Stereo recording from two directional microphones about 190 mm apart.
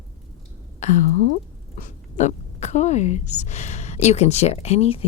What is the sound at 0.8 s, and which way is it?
Speech, 40° left (ahead or behind).